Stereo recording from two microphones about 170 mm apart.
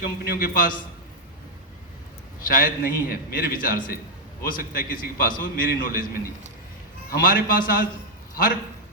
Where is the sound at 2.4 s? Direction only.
55° left (ahead or behind).